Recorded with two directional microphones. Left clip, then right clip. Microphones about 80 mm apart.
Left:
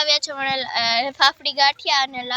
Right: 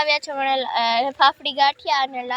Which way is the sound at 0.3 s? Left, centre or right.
Right.